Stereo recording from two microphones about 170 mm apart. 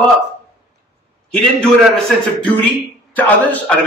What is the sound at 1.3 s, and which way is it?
A man's voice, 5° left (ahead or behind).